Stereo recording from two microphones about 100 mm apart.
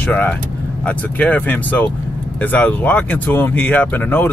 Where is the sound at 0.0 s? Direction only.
15° left (ahead or behind).